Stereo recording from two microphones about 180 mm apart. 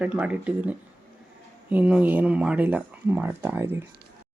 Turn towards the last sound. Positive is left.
turn(degrees=-10)  # may be behind; listen again after turning